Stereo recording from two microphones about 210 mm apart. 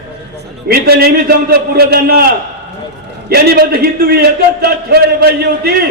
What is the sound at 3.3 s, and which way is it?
A man's voice, 45° right (ahead or behind).